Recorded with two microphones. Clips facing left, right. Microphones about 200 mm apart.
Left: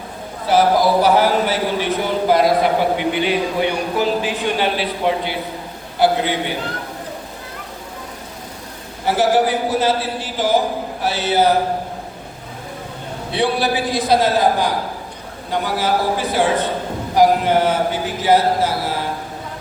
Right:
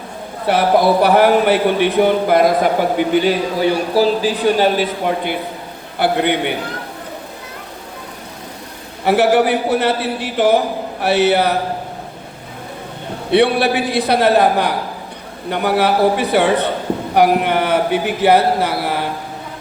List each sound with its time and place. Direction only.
0.4 s a man's voice: 60° right (ahead or behind)
3.1 s a man's voice: 40° right (ahead or behind); by 6.5 s 60° right (ahead or behind)
9.0 s a man's voice: 65° right (ahead or behind)
13.3 s a man's voice: 65° right (ahead or behind)